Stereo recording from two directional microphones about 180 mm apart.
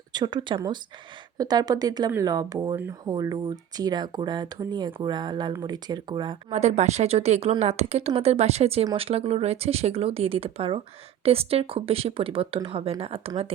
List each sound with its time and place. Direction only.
0.1 s speech: 25° right (ahead or behind)
6.5 s speech: 40° right (ahead or behind)